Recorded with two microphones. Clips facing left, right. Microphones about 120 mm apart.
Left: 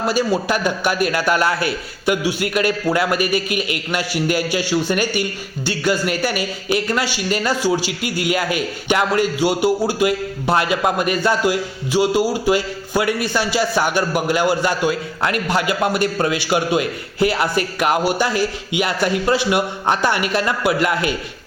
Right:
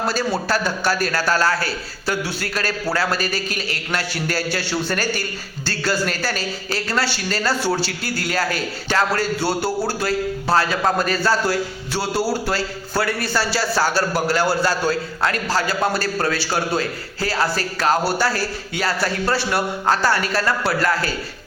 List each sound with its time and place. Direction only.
0.4 s a man's voice: 15° left (ahead or behind)